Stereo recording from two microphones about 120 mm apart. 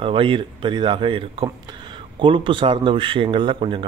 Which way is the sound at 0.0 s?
50° right (ahead or behind).